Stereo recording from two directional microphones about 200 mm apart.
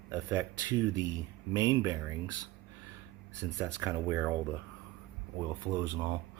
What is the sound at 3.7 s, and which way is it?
Speech, 15° right (ahead or behind).